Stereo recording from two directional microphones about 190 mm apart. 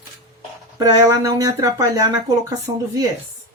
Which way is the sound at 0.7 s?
20° right (ahead or behind).